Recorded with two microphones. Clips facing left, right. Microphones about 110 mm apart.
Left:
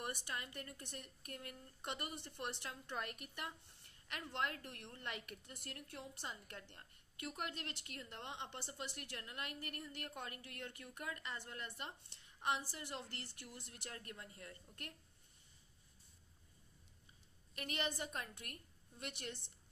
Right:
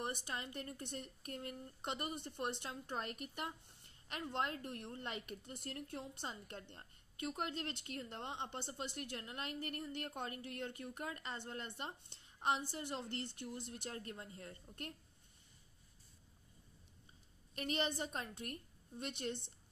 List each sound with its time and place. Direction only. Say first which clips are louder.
0.0 s a woman's voice: right 3 dB; 25° right (ahead or behind)
17.6 s a woman's voice: right 4 dB; 25° right (ahead or behind)